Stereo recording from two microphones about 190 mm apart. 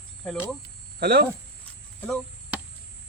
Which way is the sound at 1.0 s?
55° right (ahead or behind).